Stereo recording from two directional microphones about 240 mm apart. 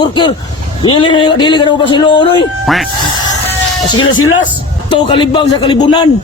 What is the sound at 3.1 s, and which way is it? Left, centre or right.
Music, centre.